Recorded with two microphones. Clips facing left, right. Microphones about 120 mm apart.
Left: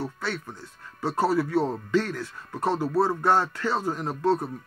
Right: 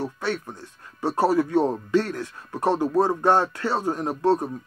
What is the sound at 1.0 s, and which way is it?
Speech, 15° right (ahead or behind).